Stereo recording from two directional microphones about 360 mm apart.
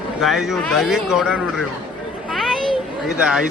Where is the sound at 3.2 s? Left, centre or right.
Centre.